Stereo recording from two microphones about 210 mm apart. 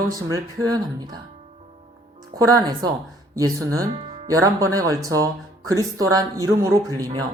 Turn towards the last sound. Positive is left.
turn(degrees=-15)  # may be behind; listen again after turning